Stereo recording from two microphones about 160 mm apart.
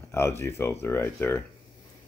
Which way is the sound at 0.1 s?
15° left (ahead or behind).